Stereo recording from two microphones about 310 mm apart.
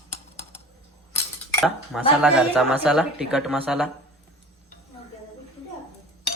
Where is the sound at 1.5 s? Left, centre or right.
Centre.